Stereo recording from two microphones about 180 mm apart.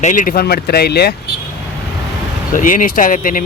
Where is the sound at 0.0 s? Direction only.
45° left (ahead or behind); by 1.1 s 65° left (ahead or behind).